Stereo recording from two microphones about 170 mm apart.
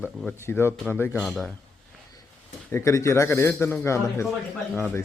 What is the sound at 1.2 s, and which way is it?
Speech, centre (ahead or behind).